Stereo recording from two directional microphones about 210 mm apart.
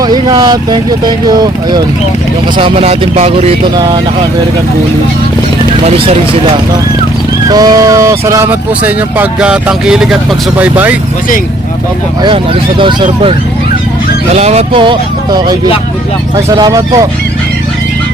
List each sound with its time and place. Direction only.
0.0 s vehicle: 20° right (ahead or behind)
1.3 s speech: 20° right (ahead or behind)
7.5 s speech: 20° right (ahead or behind)
14.3 s speech: 30° right (ahead or behind); by 17.1 s 15° right (ahead or behind)